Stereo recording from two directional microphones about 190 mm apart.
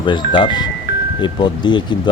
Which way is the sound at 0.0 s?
25° left (ahead or behind).